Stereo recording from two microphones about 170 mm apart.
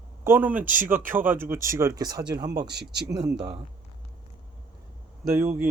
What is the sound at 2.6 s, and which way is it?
Speech, 75° right (ahead or behind).